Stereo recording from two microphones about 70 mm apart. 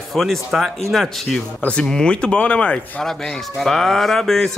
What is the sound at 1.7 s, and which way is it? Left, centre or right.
A man's voice, centre.